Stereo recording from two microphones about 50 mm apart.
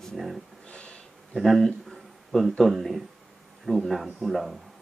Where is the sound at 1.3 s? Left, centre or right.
Centre.